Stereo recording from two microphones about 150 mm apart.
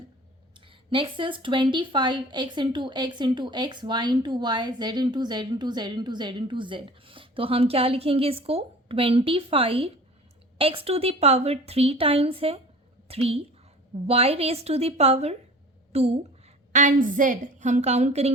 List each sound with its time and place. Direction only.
0.5 s a woman's voice: 35° right (ahead or behind)
16.7 s a woman's voice: 60° right (ahead or behind)